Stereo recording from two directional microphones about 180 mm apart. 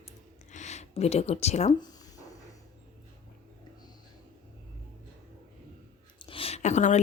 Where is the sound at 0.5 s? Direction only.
40° left (ahead or behind).